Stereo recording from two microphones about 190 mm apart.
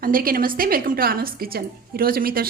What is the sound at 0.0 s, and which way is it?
Speech, 50° right (ahead or behind).